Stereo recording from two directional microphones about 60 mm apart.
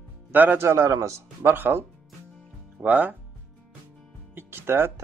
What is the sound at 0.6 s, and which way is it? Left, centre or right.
Speech, right.